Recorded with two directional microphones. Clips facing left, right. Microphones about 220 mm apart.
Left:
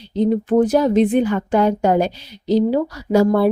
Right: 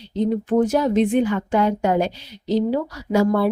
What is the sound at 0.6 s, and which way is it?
Speech, 35° left (ahead or behind).